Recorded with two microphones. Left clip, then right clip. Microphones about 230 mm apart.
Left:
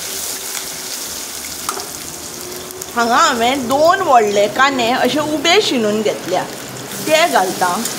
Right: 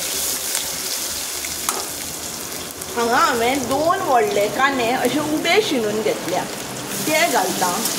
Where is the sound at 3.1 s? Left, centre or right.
Left.